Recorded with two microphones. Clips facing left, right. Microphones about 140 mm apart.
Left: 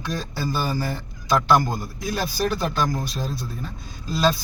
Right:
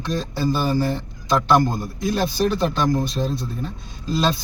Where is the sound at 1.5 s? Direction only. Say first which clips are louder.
Right 4 dB; 5° left (ahead or behind).